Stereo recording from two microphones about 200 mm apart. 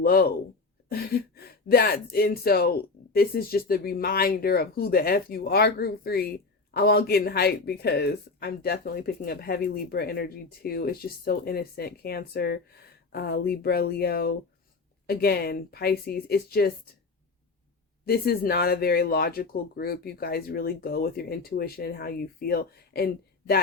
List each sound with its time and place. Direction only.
0.0 s speech: 50° left (ahead or behind)
18.0 s speech: 50° left (ahead or behind)